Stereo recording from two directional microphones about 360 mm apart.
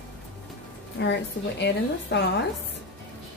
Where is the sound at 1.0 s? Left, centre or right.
Left.